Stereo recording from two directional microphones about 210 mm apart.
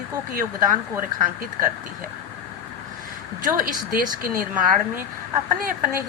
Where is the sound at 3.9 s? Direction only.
40° right (ahead or behind).